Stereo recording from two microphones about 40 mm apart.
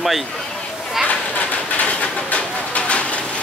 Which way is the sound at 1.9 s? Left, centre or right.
Left.